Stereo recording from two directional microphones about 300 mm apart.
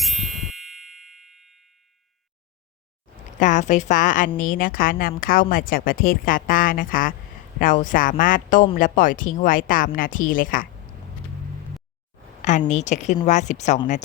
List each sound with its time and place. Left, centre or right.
0.0 s ding: centre
3.3 s a woman's voice: left
12.4 s a woman's voice: left